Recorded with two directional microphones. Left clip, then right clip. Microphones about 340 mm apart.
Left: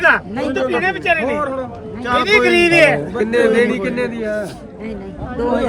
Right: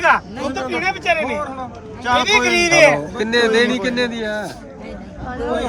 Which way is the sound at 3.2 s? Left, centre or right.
Right.